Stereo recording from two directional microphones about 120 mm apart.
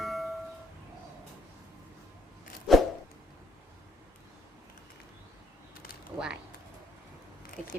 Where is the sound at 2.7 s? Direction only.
Centre (ahead or behind).